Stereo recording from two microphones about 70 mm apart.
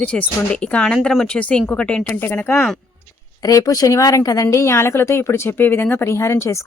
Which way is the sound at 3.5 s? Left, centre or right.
Left.